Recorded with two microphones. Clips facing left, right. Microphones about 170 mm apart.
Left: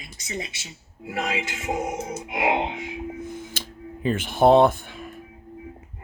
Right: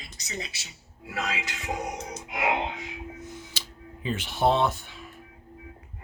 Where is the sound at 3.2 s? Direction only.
55° left (ahead or behind).